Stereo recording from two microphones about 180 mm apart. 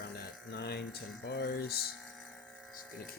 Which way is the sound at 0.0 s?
65° left (ahead or behind).